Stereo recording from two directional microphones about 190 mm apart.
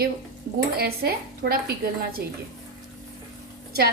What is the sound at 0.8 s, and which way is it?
Speech, 55° right (ahead or behind).